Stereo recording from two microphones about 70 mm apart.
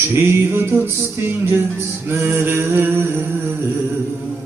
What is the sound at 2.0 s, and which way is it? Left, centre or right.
Music, right.